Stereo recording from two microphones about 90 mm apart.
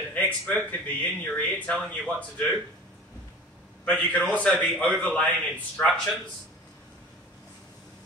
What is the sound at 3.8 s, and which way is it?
A man's voice, 15° left (ahead or behind).